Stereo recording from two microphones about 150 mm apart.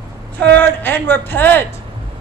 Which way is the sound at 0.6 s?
15° left (ahead or behind).